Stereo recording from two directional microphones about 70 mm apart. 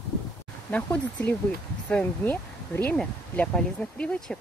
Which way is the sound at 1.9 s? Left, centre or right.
Left.